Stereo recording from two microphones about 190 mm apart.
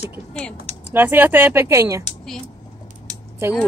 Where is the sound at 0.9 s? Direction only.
10° right (ahead or behind).